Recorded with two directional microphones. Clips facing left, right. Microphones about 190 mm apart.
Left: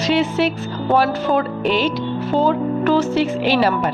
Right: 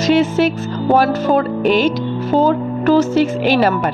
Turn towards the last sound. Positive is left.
turn(degrees=-50)  # may be behind; listen again after turning